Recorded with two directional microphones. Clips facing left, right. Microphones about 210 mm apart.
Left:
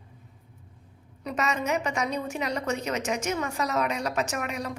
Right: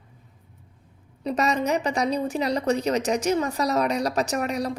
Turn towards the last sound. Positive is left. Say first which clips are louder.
# right 6 dB
turn(degrees=-35)  # may be behind; listen again after turning